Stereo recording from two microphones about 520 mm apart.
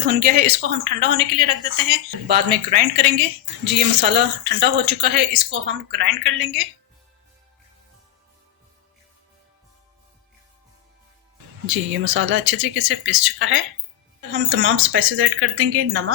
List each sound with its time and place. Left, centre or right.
0.1 s a woman's voice: centre
11.6 s speech: right